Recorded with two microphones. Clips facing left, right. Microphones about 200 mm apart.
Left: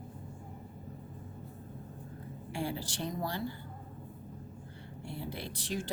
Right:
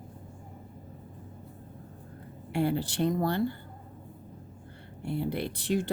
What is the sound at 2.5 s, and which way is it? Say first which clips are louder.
Speech: right 9 dB; 60° right (ahead or behind).